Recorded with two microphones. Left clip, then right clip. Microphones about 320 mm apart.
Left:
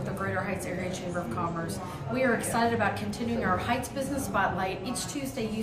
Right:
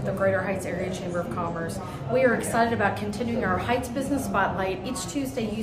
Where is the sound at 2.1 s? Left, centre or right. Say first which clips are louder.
Right 5 dB; centre.